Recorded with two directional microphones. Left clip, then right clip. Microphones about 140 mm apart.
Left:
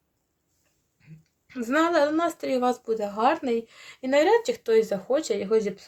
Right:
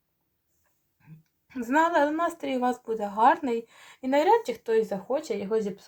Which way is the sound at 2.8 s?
45° left (ahead or behind).